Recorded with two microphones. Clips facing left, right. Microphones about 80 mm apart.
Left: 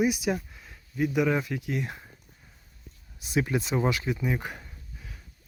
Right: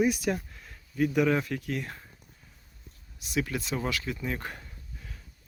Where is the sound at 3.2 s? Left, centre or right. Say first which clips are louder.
Left 4 dB; left; by 5.2 s centre.